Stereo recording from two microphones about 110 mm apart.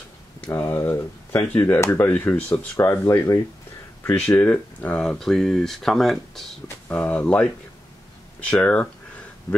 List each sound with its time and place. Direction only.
0.5 s speech: 20° left (ahead or behind)
2.9 s speech: 25° left (ahead or behind)
8.5 s speech: 15° left (ahead or behind)